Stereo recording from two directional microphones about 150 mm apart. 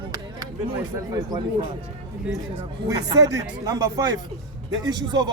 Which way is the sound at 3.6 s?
20° right (ahead or behind).